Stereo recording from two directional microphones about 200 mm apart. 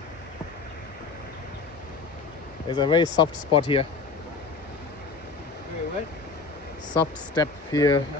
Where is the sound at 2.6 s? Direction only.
25° left (ahead or behind).